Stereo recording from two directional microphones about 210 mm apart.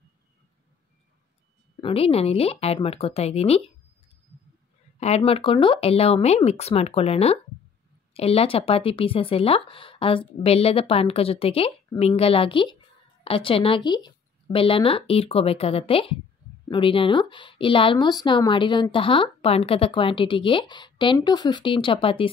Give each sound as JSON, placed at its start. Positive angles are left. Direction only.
{"t": 1.8, "sound": "a woman's voice", "side_deg": 25}
{"t": 5.0, "sound": "a woman's voice", "side_deg": 30}